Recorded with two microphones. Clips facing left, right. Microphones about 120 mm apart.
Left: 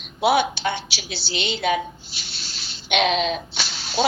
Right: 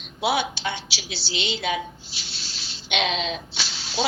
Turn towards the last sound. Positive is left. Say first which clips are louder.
# left 4 dB
turn(degrees=55)  # may be behind; listen again after turning